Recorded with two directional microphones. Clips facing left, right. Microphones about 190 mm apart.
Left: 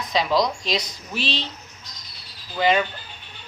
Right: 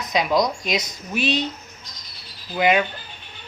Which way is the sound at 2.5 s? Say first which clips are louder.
Right 1 dB; 15° right (ahead or behind).